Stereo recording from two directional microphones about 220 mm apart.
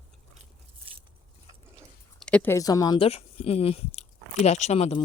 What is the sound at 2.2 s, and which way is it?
Speech, 5° left (ahead or behind).